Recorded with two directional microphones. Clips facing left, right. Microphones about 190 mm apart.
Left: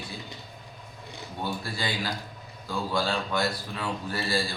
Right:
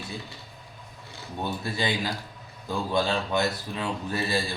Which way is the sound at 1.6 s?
20° right (ahead or behind).